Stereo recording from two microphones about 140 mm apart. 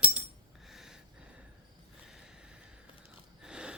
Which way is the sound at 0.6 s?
Centre (ahead or behind).